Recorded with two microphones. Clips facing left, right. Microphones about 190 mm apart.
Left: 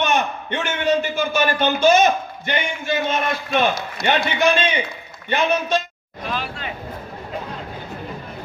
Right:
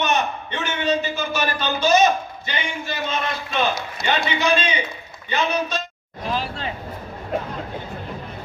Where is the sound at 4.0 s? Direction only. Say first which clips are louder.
Left 4 dB; 55° left (ahead or behind).